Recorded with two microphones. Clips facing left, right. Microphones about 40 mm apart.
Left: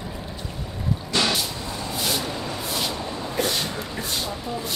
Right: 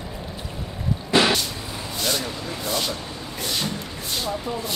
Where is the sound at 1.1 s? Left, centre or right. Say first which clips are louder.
Right 5 dB; right.